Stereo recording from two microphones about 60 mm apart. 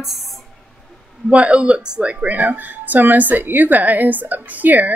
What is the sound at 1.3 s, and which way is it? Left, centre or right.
Speech, right.